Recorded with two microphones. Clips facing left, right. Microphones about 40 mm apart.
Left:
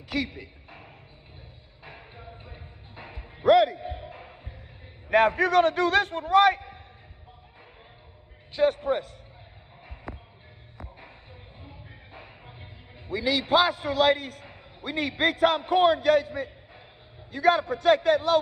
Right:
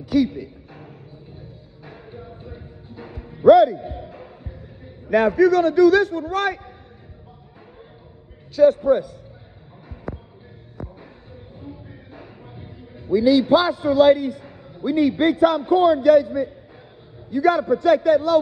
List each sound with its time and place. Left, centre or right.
0.0 s a sound: centre
1.9 s music: left
3.4 s speech: centre
3.8 s basketball bounce: left
5.1 s a man's voice: left
8.5 s a man's voice: left
10.1 s music: centre
12.1 s a man's voice: left